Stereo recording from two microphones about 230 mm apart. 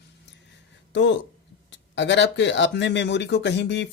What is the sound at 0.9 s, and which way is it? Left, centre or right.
Speech, left.